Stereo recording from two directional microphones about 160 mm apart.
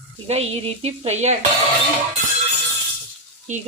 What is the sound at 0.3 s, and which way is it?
A woman's voice, 40° right (ahead or behind).